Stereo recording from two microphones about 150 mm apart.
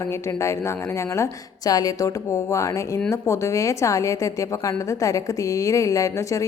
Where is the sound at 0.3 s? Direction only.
20° left (ahead or behind).